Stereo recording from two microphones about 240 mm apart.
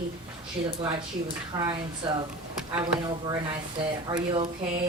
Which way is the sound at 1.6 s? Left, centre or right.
Centre.